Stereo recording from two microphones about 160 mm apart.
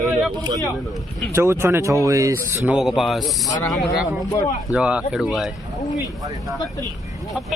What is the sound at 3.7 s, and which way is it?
Speech, centre (ahead or behind).